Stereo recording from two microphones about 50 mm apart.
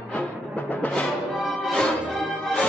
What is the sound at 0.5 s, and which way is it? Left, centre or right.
Music, left.